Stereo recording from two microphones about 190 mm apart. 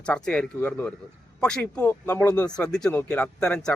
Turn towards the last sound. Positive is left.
turn(degrees=5)  # may be behind; listen again after turning